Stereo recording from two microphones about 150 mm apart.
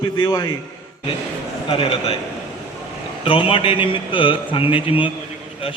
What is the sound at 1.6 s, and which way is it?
Speech, 40° left (ahead or behind).